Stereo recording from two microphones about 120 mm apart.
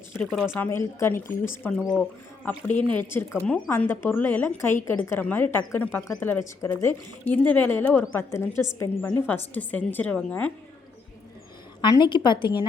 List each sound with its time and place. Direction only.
0.2 s speech: centre (ahead or behind)
0.6 s a woman's voice: 20° left (ahead or behind)
1.8 s a woman's voice: 5° left (ahead or behind)
11.8 s a woman's voice: 40° left (ahead or behind)